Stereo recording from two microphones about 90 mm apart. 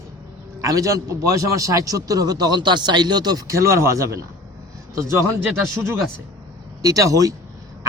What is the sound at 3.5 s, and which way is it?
Speech, 35° right (ahead or behind).